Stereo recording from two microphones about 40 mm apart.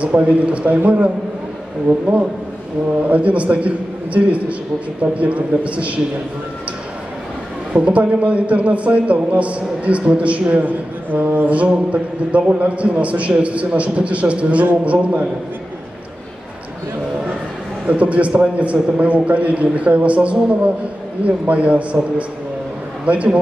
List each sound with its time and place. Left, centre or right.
0.0 s a man's voice: right
7.7 s a man's voice: right
11.1 s a man's voice: right
17.8 s a man's voice: right
23.0 s a man's voice: right